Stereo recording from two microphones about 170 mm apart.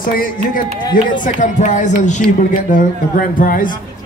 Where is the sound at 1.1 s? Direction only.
50° left (ahead or behind).